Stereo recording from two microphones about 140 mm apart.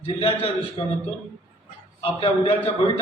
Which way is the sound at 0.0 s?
40° left (ahead or behind).